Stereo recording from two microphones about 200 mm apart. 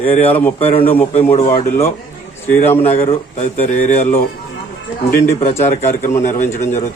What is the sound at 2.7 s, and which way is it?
Speech, 30° left (ahead or behind).